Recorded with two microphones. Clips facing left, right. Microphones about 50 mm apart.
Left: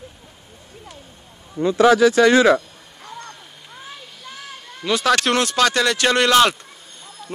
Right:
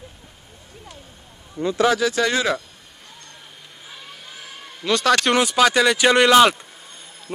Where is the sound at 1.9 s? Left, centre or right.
Left.